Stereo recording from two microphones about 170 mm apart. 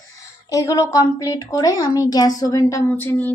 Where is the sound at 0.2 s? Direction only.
20° left (ahead or behind).